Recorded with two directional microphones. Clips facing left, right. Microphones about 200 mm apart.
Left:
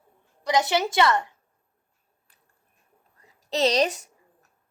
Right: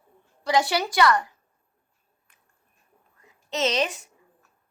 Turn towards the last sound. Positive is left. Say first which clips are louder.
# left 3 dB
turn(degrees=40)  # may be behind; listen again after turning